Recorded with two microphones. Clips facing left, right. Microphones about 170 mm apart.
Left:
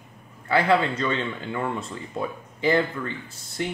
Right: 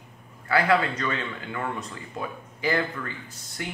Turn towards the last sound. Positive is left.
turn(degrees=30)  # may be behind; listen again after turning